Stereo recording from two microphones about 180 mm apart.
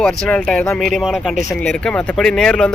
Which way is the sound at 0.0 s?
5° left (ahead or behind).